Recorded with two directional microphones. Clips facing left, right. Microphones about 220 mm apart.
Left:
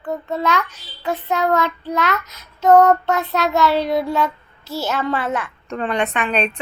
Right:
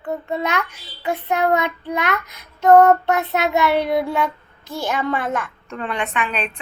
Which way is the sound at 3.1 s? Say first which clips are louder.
Even; 20° right (ahead or behind).